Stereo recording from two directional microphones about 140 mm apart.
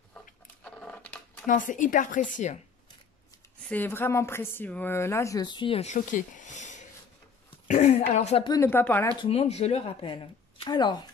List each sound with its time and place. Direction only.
0.7 s a sound: 10° left (ahead or behind)
1.5 s a woman's voice: 70° left (ahead or behind)
3.6 s speech: 15° left (ahead or behind); by 5.9 s 40° left (ahead or behind)
5.9 s speech: 65° left (ahead or behind)
8.6 s speech: 15° left (ahead or behind)
9.2 s speech: 45° left (ahead or behind)